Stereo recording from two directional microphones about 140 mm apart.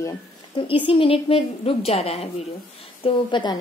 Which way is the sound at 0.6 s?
40° left (ahead or behind).